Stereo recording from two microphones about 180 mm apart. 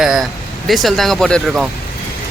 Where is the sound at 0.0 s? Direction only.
Centre (ahead or behind).